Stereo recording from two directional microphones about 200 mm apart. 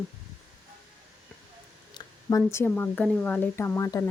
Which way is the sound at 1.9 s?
15° left (ahead or behind).